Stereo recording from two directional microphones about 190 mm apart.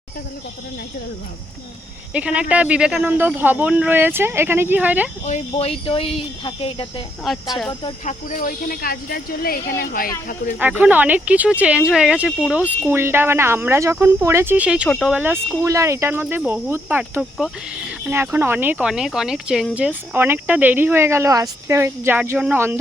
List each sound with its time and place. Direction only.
2.1 s speech: 5° right (ahead or behind)
5.2 s speech: 35° left (ahead or behind)
7.3 s speech: centre (ahead or behind)
8.0 s speech: 40° left (ahead or behind)
10.6 s speech: 10° right (ahead or behind)